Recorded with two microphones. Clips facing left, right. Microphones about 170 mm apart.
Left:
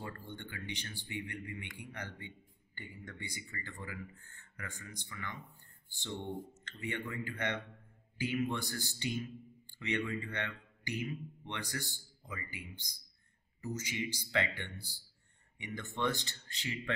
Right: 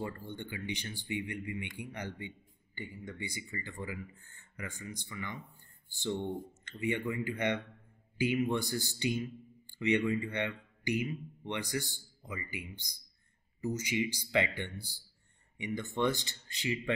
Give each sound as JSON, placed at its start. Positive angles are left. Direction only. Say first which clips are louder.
{"t": 0.0, "sound": "speech", "louder": "right 5 dB", "side_deg": -15}
{"t": 6.6, "sound": "speech", "louder": "right 7 dB", "side_deg": -15}